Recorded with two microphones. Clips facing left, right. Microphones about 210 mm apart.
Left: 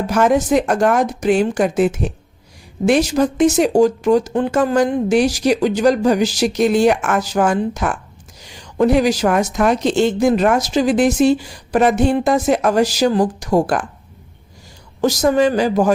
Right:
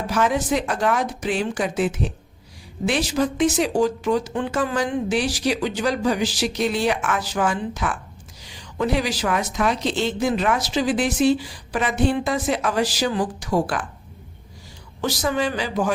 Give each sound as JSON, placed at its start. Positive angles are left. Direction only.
{"t": 0.1, "sound": "a woman's voice", "side_deg": 45}
{"t": 15.0, "sound": "a woman's voice", "side_deg": 45}